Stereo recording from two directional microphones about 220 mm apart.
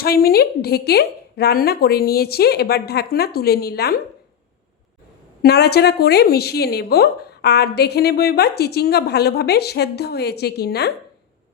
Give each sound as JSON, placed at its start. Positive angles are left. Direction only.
{"t": 0.0, "sound": "a woman's voice", "side_deg": 45}
{"t": 5.4, "sound": "a woman's voice", "side_deg": 45}